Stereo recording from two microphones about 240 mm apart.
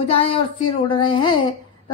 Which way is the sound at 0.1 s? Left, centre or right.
Left.